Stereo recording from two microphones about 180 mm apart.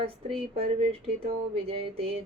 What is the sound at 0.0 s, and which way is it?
A woman's voice, 30° right (ahead or behind).